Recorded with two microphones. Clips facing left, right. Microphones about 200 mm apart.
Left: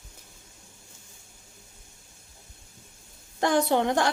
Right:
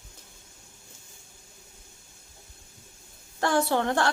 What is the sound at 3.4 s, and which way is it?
Speech, 20° left (ahead or behind).